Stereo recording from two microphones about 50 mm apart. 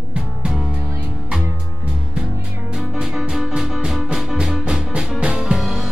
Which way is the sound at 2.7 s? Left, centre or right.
Centre.